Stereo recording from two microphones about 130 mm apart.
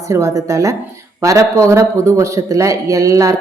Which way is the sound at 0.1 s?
25° right (ahead or behind).